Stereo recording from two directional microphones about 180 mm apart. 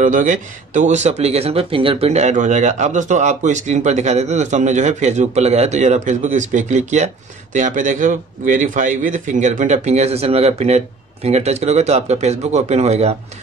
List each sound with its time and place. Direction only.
0.0 s a man's voice: 45° right (ahead or behind)